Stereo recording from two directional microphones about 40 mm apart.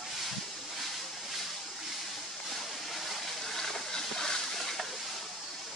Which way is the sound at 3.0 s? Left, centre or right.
Centre.